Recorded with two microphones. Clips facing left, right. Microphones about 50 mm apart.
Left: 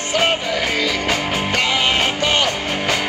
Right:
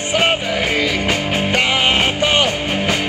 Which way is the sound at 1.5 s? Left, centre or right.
Right.